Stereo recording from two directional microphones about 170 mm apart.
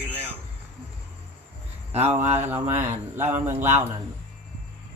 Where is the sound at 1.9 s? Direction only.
40° right (ahead or behind).